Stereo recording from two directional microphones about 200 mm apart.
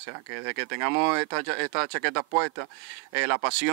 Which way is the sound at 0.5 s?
15° right (ahead or behind).